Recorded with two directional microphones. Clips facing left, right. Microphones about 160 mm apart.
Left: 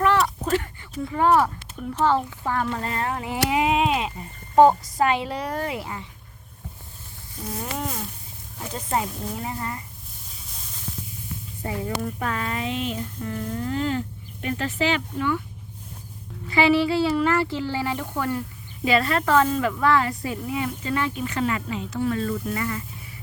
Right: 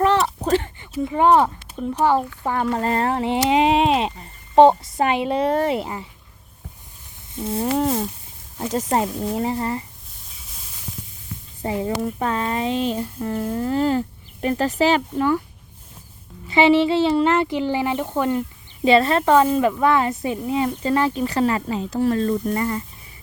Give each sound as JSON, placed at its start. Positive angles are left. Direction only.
{"t": 0.0, "sound": "a sound", "side_deg": -25}
{"t": 1.0, "sound": "speech", "side_deg": -20}
{"t": 2.6, "sound": "speech", "side_deg": -40}
{"t": 7.3, "sound": "speech", "side_deg": -30}
{"t": 11.6, "sound": "speech", "side_deg": -25}
{"t": 16.5, "sound": "speech", "side_deg": -20}